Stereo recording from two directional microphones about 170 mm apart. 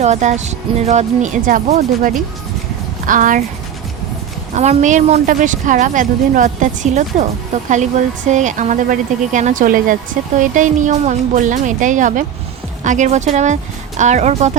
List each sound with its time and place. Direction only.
0.0 s speech: 40° right (ahead or behind)
4.5 s speech: 45° right (ahead or behind)